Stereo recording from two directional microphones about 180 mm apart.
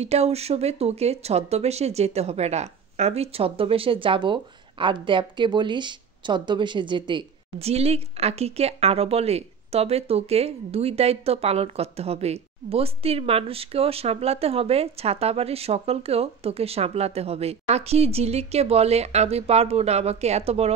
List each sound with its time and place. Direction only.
0.0 s speech: 35° right (ahead or behind)